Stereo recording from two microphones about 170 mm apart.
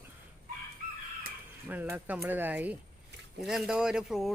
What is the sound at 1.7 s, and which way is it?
Speech, 10° right (ahead or behind).